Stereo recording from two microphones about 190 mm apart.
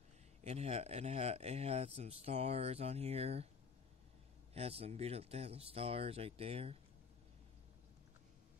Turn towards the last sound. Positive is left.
turn(degrees=-30)  # may be behind; listen again after turning